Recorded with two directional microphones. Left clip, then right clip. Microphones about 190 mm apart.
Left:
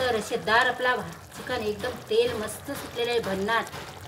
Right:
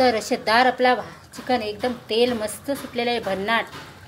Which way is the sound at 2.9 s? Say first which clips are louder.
Right 2 dB; 20° right (ahead or behind).